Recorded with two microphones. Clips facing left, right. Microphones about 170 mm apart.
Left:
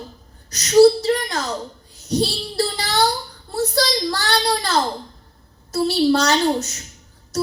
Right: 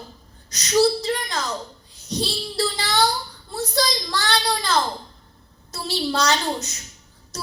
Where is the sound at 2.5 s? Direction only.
40° left (ahead or behind).